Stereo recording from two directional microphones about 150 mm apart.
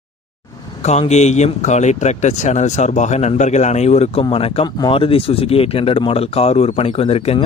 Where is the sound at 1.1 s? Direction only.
50° left (ahead or behind).